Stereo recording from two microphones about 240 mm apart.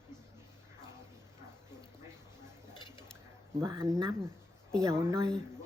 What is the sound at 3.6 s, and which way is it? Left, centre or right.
Speech, centre.